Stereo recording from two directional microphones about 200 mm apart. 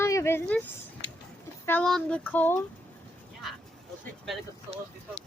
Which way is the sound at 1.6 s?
5° left (ahead or behind).